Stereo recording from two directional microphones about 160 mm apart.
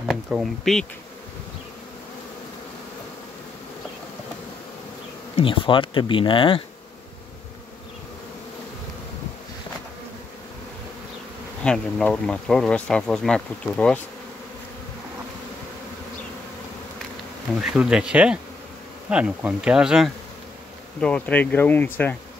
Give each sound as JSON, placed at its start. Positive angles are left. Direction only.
{"t": 0.0, "sound": "speech", "side_deg": 0}
{"t": 5.3, "sound": "speech", "side_deg": 35}
{"t": 11.6, "sound": "speech", "side_deg": 5}
{"t": 17.6, "sound": "speech", "side_deg": -5}
{"t": 21.0, "sound": "speech", "side_deg": 10}